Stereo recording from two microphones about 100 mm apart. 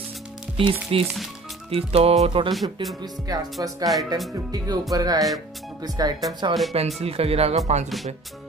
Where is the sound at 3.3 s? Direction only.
40° right (ahead or behind).